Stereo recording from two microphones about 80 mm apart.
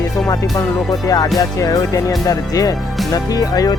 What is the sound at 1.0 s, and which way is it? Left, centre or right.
Speech, left.